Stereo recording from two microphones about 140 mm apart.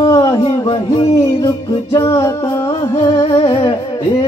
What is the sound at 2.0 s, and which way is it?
Music, 20° left (ahead or behind).